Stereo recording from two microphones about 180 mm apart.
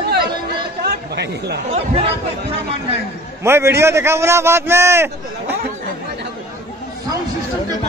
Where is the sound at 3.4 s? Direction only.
15° right (ahead or behind).